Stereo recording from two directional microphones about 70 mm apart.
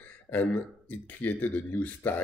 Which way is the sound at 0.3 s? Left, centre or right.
Left.